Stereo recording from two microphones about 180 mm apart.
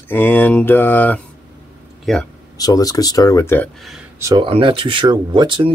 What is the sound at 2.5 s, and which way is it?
Speech, 20° left (ahead or behind).